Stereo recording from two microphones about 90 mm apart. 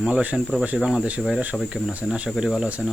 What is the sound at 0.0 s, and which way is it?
Speech, 15° right (ahead or behind).